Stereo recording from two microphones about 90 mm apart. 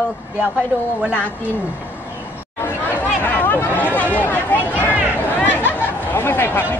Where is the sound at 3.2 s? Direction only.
20° left (ahead or behind).